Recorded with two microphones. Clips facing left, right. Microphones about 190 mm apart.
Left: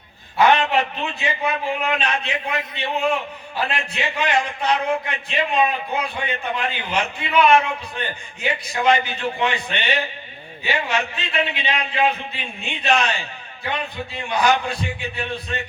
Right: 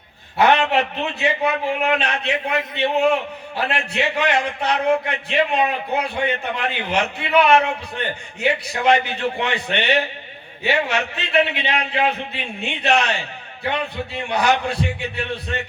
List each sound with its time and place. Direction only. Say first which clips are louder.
0.3 s a man's voice: right 1 dB; 65° right (ahead or behind)